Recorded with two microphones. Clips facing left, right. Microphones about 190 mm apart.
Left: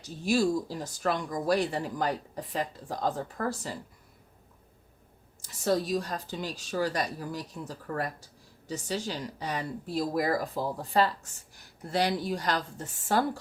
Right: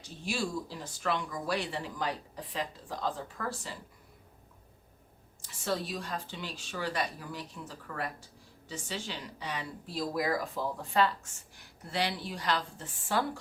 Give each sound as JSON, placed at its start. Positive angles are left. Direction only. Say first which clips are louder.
{"t": 0.0, "sound": "speech", "louder": "left 9 dB", "side_deg": 40}
{"t": 5.4, "sound": "speech", "louder": "left 6 dB", "side_deg": 40}